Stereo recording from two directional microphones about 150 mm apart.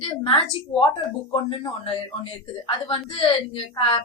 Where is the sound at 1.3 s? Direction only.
35° left (ahead or behind).